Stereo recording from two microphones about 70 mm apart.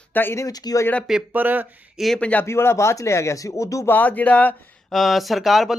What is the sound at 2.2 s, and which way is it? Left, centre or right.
Speech, centre.